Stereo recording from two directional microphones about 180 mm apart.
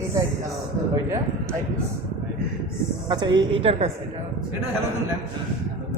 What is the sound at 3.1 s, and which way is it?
Speech, 25° right (ahead or behind).